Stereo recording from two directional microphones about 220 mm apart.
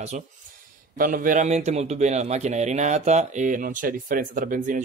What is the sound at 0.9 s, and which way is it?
A man's voice, 40° right (ahead or behind).